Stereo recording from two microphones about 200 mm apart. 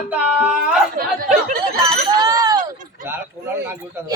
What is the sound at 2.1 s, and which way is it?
Speech, 20° right (ahead or behind).